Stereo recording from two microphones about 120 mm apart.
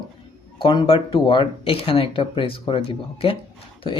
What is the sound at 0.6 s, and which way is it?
Speech, 40° left (ahead or behind).